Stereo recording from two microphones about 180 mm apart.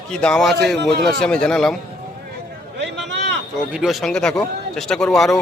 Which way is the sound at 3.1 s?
80° right.